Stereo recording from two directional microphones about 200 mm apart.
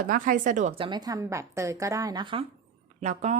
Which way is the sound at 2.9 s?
35° right (ahead or behind).